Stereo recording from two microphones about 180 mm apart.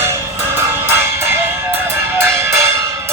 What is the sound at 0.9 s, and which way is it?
Music, 15° right (ahead or behind).